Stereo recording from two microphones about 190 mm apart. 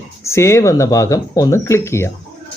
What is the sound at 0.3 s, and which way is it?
Speech, 15° left (ahead or behind).